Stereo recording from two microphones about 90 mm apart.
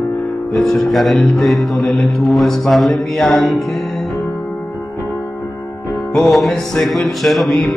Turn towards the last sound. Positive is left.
turn(degrees=5)  # may be behind; listen again after turning